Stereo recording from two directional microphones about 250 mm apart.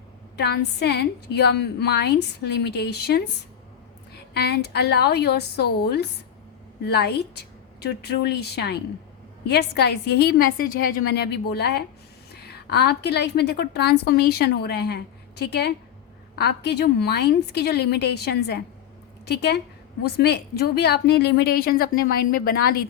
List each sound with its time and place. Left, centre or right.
0.3 s a woman's voice: left
4.4 s a woman's voice: left